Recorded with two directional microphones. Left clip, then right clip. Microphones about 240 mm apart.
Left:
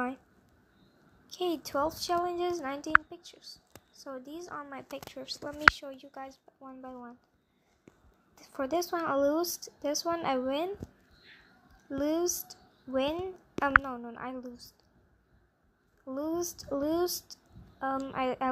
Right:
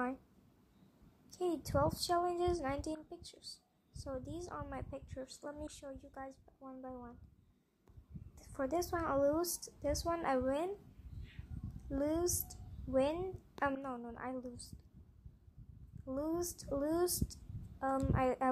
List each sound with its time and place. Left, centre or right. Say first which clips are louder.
1.3 s a woman's voice: left 4 dB; centre
8.4 s a woman's voice: left 6 dB; centre
11.9 s a woman's voice: left 6 dB; centre
16.1 s a woman's voice: left 5 dB; centre